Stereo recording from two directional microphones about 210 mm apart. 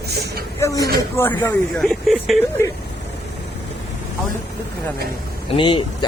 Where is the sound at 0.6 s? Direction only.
15° left (ahead or behind).